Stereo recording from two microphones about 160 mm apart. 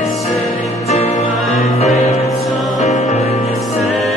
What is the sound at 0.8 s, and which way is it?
Music, 40° left (ahead or behind).